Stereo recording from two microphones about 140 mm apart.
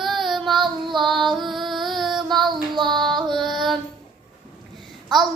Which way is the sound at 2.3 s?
30° right (ahead or behind).